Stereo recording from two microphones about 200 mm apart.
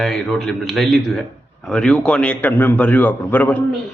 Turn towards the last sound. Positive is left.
turn(degrees=10)  # may be behind; listen again after turning